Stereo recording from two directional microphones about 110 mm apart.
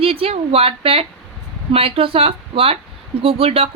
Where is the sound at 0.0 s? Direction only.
60° right (ahead or behind).